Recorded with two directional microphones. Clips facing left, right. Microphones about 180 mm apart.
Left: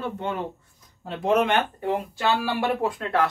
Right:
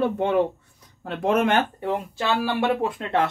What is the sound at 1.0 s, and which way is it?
Speech, 50° right (ahead or behind).